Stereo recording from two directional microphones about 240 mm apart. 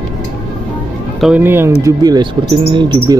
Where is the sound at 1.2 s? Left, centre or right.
Centre.